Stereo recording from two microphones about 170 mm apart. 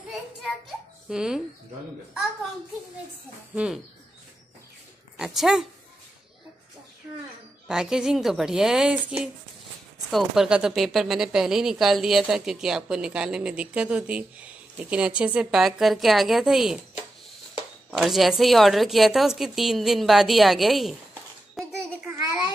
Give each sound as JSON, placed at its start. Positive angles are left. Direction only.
{"t": 1.0, "sound": "speech", "side_deg": -5}
{"t": 3.5, "sound": "speech", "side_deg": -5}
{"t": 5.1, "sound": "speech", "side_deg": -5}
{"t": 7.6, "sound": "speech", "side_deg": -5}
{"t": 17.9, "sound": "speech", "side_deg": 0}
{"t": 21.6, "sound": "a sound", "side_deg": 0}
{"t": 22.2, "sound": "a sound", "side_deg": -20}